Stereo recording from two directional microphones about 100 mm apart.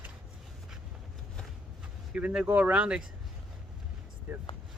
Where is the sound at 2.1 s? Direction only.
10° right (ahead or behind).